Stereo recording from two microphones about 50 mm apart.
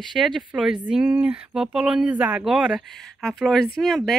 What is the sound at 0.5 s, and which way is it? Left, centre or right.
Speech, centre.